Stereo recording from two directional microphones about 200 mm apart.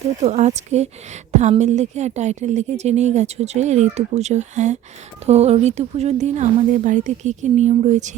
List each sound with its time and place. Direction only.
0.2 s a woman's voice: 35° right (ahead or behind)